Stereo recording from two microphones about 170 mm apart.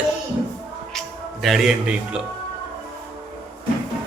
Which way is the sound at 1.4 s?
Centre (ahead or behind).